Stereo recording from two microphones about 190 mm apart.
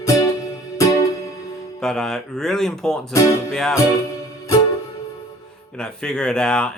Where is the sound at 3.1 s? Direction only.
15° left (ahead or behind).